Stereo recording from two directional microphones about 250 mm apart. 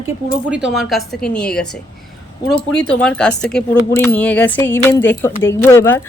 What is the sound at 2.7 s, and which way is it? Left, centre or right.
Speech, centre.